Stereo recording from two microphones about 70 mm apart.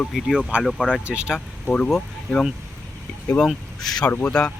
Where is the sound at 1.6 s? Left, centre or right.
Centre.